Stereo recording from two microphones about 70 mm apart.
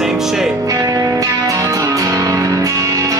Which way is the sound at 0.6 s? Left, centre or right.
Right.